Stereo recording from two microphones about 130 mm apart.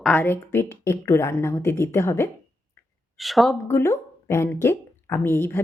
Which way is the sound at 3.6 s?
20° left (ahead or behind).